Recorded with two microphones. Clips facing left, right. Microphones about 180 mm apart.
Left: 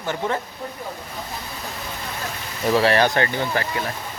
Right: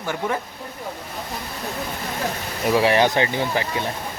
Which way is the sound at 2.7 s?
15° right (ahead or behind).